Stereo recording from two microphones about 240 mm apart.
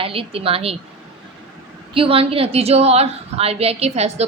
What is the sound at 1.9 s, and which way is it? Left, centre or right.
A woman's voice, right.